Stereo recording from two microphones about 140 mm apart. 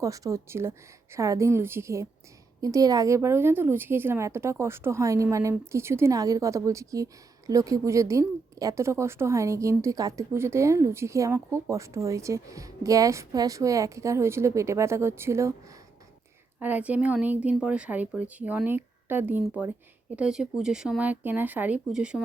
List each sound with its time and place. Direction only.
0.0 s a woman's voice: 25° right (ahead or behind)
16.6 s speech: 10° right (ahead or behind)